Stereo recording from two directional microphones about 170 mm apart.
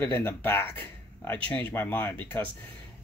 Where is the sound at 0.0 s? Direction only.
10° left (ahead or behind).